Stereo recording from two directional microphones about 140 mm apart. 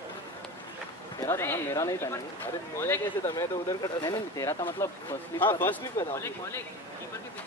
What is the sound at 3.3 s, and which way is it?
Speech, 30° left (ahead or behind).